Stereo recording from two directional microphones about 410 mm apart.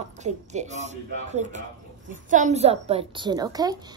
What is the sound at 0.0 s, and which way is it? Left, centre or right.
A woman's voice, centre.